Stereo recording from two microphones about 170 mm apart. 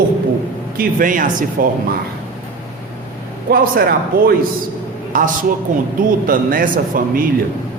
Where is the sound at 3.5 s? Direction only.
60° right (ahead or behind).